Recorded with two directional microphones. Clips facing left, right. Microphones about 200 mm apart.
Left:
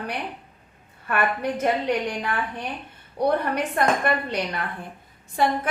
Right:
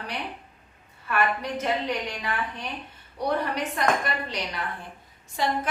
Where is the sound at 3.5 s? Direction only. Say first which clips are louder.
Left 3 dB; 55° left (ahead or behind).